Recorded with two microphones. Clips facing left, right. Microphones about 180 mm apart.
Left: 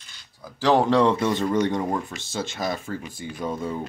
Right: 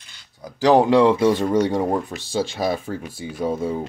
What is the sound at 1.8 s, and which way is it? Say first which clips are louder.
Speech: right 4 dB; 25° right (ahead or behind).